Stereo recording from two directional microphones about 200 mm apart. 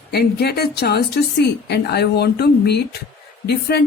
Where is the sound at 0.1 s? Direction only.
55° left (ahead or behind).